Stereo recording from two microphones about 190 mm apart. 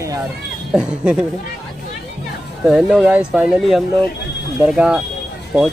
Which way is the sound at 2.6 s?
5° right (ahead or behind).